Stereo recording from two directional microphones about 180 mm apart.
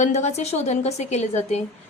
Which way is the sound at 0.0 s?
40° left (ahead or behind).